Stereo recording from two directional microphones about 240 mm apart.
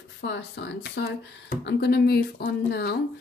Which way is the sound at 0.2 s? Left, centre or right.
Left.